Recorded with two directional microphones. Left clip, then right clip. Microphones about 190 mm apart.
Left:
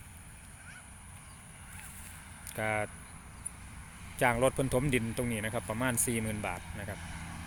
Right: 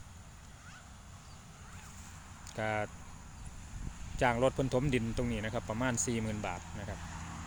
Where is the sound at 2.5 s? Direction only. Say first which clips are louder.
Left 2 dB; centre (ahead or behind).